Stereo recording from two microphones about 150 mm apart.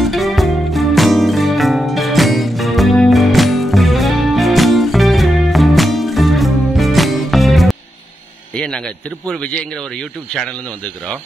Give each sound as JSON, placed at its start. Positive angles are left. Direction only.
{"t": 0.0, "sound": "music", "side_deg": 0}
{"t": 8.5, "sound": "a man's voice", "side_deg": 5}